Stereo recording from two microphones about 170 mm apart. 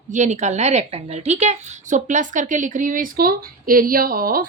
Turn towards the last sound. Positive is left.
turn(degrees=-60)  # may be behind; listen again after turning